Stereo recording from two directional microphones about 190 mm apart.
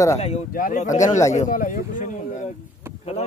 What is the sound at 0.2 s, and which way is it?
Speech, 40° left (ahead or behind).